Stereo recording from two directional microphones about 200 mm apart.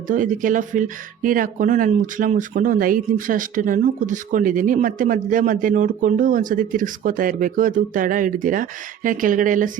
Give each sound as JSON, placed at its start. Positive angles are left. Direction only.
{"t": 0.1, "sound": "speech", "side_deg": -40}